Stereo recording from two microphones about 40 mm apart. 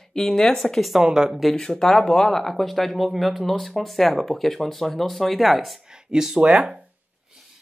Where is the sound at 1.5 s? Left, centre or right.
Centre.